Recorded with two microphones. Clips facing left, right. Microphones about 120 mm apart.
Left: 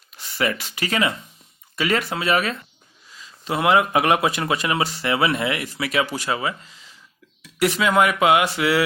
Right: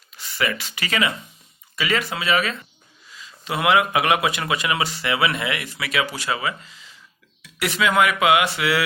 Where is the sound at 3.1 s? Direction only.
35° left (ahead or behind).